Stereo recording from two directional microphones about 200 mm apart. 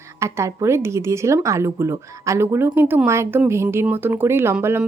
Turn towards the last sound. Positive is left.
turn(degrees=-10)  # may be behind; listen again after turning